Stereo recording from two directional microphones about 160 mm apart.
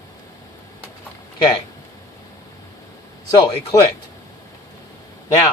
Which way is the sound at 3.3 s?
25° left (ahead or behind).